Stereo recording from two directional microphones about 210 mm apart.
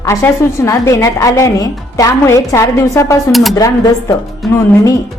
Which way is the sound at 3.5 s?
15° left (ahead or behind).